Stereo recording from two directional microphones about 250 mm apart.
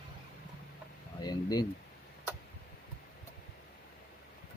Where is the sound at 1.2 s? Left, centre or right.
Centre.